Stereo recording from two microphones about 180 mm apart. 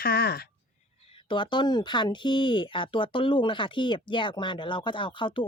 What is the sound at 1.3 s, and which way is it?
Speech, 25° left (ahead or behind).